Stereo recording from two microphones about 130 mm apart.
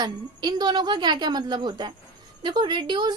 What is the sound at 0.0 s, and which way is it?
A woman's voice, 30° right (ahead or behind).